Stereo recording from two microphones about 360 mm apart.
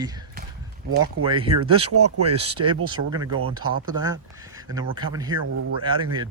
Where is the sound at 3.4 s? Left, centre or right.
Right.